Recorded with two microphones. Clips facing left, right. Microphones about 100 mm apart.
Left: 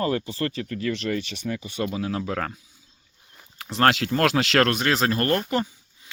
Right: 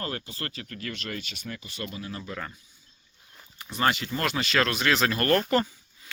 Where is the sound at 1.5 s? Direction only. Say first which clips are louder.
Left 10 dB; 90° left.